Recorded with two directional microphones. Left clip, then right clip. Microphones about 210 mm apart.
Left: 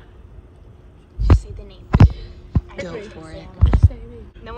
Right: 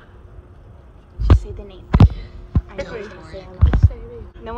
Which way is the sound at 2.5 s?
5° left (ahead or behind).